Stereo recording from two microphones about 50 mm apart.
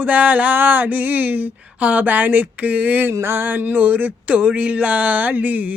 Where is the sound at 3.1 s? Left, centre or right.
Right.